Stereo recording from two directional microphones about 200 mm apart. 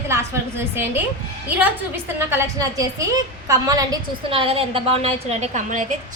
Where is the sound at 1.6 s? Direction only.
10° right (ahead or behind).